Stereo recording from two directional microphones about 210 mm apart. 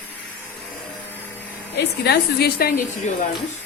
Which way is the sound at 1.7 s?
50° left (ahead or behind).